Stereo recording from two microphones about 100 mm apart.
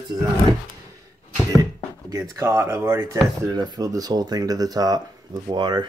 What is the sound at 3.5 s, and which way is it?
Speech, 45° right (ahead or behind).